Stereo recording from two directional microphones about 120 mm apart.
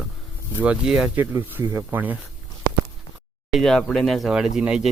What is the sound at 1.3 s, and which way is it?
Speech, 25° right (ahead or behind).